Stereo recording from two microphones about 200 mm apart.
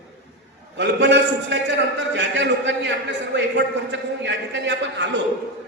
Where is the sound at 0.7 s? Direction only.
60° right (ahead or behind).